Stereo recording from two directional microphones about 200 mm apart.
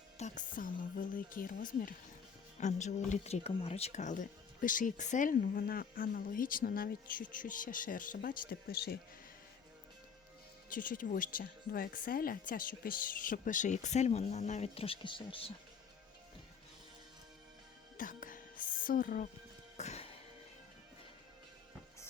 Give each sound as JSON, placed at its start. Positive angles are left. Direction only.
{"t": 0.2, "sound": "speech", "side_deg": 40}
{"t": 10.7, "sound": "speech", "side_deg": 45}
{"t": 17.9, "sound": "music", "side_deg": 40}